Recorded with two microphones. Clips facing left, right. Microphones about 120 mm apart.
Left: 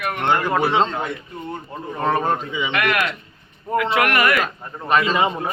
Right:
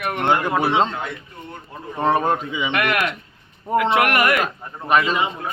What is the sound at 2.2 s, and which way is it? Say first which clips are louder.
Speech: right 1 dB; 10° right (ahead or behind).